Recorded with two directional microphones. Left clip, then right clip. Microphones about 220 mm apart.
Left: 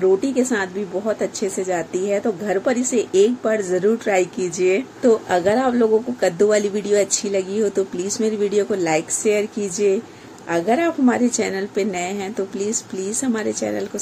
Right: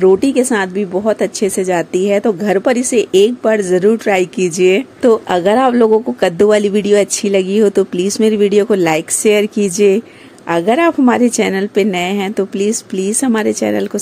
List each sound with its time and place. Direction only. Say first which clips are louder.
0.0 s a woman's voice: right 7 dB; 40° right (ahead or behind)